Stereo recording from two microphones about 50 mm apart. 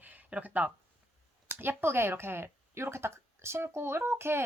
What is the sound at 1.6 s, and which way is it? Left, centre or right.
Speech, right.